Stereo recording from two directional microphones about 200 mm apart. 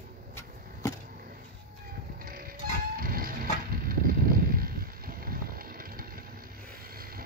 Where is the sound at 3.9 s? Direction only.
45° right (ahead or behind).